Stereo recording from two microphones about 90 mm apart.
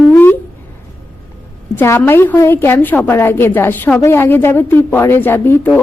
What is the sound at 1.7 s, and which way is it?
Speech, 30° left (ahead or behind).